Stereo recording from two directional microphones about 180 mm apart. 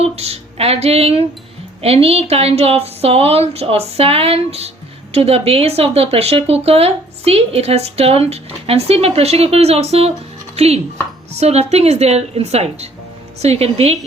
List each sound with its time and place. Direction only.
0.0 s speech: 35° right (ahead or behind)
11.3 s speech: 35° right (ahead or behind)